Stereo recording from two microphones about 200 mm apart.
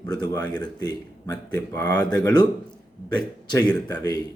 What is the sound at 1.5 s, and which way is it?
Speech, 10° left (ahead or behind).